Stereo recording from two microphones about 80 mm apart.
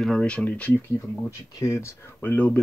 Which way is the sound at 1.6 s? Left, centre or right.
Left.